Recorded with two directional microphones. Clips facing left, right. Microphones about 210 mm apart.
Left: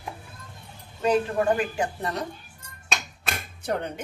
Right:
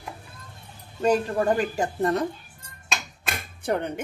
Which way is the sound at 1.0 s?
40° right (ahead or behind).